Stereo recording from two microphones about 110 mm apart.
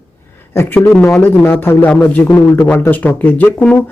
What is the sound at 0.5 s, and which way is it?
Speech, 20° left (ahead or behind).